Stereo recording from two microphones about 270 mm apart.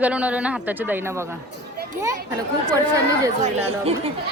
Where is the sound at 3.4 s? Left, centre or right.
Right.